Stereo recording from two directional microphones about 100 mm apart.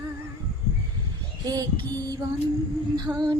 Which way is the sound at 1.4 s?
40° right (ahead or behind).